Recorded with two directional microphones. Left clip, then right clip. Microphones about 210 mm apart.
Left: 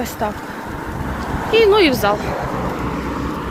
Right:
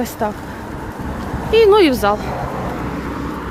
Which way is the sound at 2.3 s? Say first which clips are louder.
Left 1 dB; 50° left (ahead or behind).